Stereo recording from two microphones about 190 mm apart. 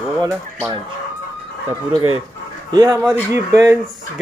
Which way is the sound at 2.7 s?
20° right (ahead or behind).